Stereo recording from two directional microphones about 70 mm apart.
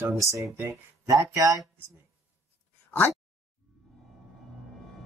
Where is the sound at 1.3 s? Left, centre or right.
Right.